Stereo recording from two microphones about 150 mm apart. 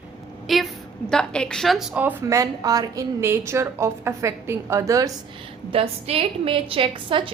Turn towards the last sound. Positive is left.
turn(degrees=-35)  # may be behind; listen again after turning